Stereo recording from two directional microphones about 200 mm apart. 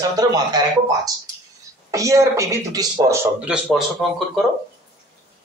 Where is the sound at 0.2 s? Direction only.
20° right (ahead or behind).